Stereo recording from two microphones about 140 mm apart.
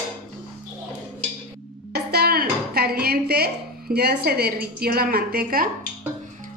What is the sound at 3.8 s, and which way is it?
A woman's voice, 90° right.